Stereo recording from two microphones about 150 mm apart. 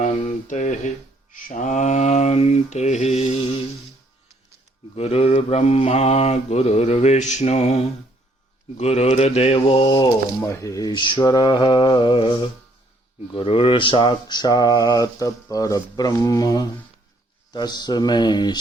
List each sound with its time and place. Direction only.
0.0 s speech: 55° left (ahead or behind)
1.3 s mantra: 60° left (ahead or behind); by 3.5 s 40° left (ahead or behind)
4.9 s mantra: 45° left (ahead or behind)
8.8 s speech: 45° left (ahead or behind)
10.4 s a sound: 20° left (ahead or behind)